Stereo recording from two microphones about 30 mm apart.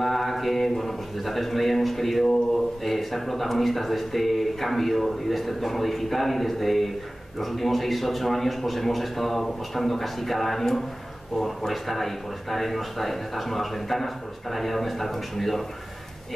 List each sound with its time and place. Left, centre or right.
0.0 s a man's voice: centre